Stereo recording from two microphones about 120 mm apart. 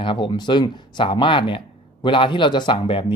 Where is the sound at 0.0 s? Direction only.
45° left (ahead or behind).